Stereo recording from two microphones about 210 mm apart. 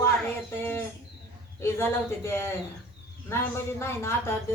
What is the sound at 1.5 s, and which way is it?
Speech, 10° left (ahead or behind).